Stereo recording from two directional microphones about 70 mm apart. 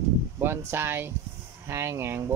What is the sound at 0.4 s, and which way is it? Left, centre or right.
Speech, right.